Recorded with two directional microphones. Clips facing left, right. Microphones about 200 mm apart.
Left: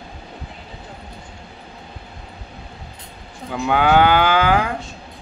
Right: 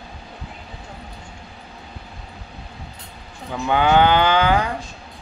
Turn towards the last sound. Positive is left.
turn(degrees=5)  # may be behind; listen again after turning